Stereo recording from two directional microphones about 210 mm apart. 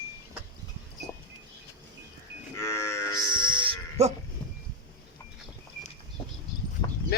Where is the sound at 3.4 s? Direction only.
25° right (ahead or behind).